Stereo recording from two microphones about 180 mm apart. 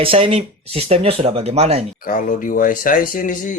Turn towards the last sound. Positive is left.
turn(degrees=50)  # may be behind; listen again after turning